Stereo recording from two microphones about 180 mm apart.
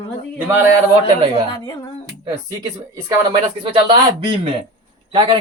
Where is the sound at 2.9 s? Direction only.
15° right (ahead or behind).